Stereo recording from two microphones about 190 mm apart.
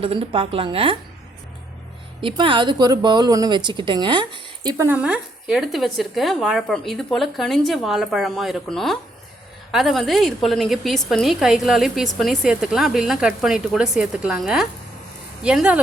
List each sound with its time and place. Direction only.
0.0 s a woman's voice: 30° right (ahead or behind)
2.2 s speech: 25° right (ahead or behind); by 15.8 s 5° right (ahead or behind)